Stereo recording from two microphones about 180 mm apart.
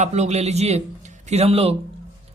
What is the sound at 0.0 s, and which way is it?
A man's voice, 40° right (ahead or behind).